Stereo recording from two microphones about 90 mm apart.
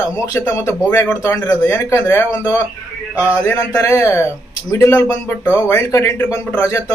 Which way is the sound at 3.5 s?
30° left (ahead or behind).